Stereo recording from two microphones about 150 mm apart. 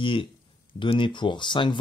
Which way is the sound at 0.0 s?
35° left (ahead or behind).